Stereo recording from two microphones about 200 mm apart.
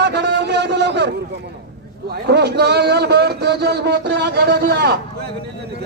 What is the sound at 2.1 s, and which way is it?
A man's voice, 55° right (ahead or behind).